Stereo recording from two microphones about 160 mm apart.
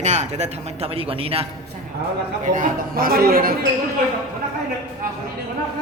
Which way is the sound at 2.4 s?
55° right (ahead or behind).